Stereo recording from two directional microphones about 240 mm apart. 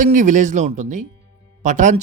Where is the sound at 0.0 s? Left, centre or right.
Right.